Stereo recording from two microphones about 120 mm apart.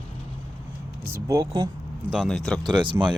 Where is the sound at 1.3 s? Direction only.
30° right (ahead or behind).